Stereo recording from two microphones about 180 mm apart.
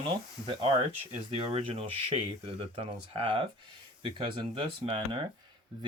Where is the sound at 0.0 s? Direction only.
25° right (ahead or behind).